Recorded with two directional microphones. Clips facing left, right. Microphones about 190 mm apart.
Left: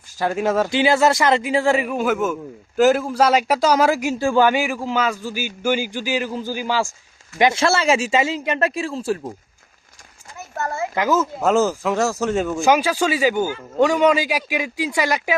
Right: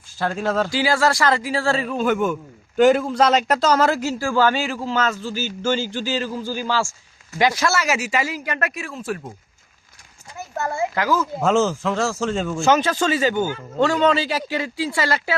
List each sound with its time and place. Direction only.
0.2 s speech: 15° left (ahead or behind)
2.7 s speech: 5° left (ahead or behind); by 9.2 s 30° left (ahead or behind)
10.9 s speech: 20° left (ahead or behind)
11.3 s speech: 5° left (ahead or behind)